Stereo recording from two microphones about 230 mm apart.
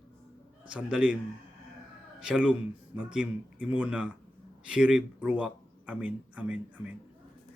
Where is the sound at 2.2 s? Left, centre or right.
Centre.